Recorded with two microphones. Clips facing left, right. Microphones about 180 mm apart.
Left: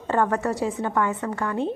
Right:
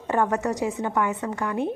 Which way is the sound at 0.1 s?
15° right (ahead or behind).